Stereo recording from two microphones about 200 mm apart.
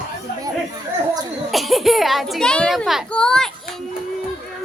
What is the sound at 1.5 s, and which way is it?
A child's voice, centre (ahead or behind).